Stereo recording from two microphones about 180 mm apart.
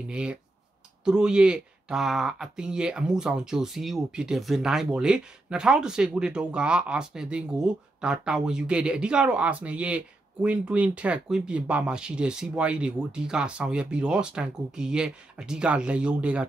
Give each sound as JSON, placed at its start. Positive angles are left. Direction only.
{"t": 0.1, "sound": "speech", "side_deg": -5}